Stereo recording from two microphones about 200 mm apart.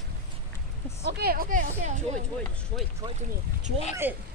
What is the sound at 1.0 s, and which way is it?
Speech, 50° right (ahead or behind).